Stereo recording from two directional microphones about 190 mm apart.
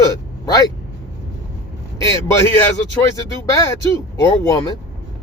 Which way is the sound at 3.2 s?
15° left (ahead or behind).